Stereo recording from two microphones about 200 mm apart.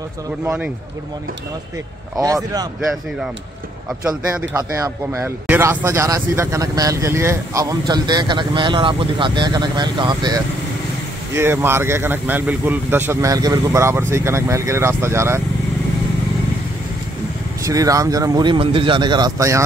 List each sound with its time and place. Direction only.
2.1 s speech: 20° right (ahead or behind)
4.6 s speech: 15° right (ahead or behind)
17.6 s speech: 15° right (ahead or behind)